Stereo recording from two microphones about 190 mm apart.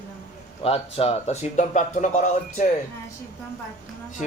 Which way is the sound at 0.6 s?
30° left (ahead or behind).